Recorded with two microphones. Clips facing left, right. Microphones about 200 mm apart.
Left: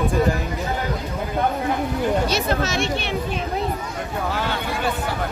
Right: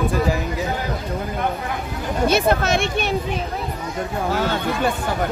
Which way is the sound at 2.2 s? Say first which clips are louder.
Right 4 dB; 55° right (ahead or behind).